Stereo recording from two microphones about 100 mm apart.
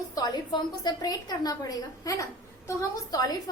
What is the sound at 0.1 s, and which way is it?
A woman's voice, 45° left (ahead or behind).